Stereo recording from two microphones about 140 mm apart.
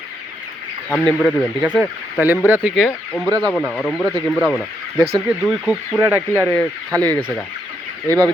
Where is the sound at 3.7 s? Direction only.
5° left (ahead or behind).